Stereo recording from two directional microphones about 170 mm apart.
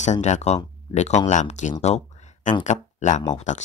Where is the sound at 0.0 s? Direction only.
45° left (ahead or behind).